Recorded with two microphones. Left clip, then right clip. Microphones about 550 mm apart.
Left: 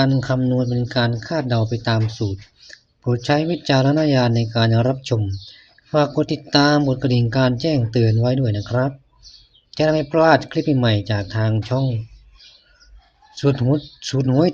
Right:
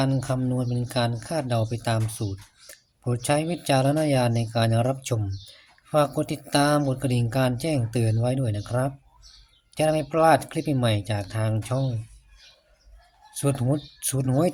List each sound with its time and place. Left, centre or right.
0.0 s speech: right
13.4 s speech: right